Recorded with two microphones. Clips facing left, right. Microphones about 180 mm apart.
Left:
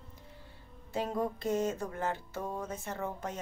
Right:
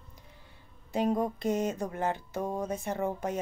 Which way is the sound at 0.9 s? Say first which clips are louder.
Right 5 dB; 15° right (ahead or behind).